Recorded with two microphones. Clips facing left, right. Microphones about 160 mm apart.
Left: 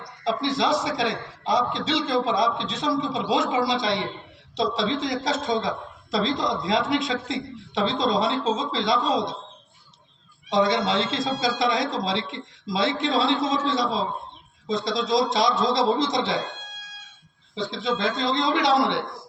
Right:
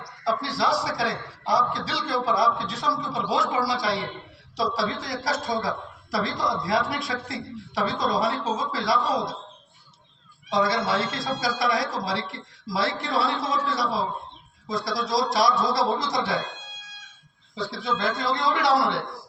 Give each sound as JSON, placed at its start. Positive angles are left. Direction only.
{"t": 0.3, "sound": "a woman's voice", "side_deg": 20}
{"t": 10.5, "sound": "a woman's voice", "side_deg": 20}
{"t": 17.5, "sound": "a woman's voice", "side_deg": 20}